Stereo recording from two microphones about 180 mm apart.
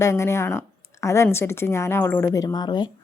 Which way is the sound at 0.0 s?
15° left (ahead or behind).